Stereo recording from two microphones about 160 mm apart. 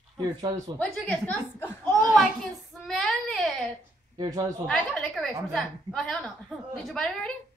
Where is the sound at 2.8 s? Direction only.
5° left (ahead or behind).